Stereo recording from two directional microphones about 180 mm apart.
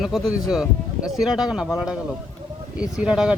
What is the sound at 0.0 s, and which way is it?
Speech, centre (ahead or behind).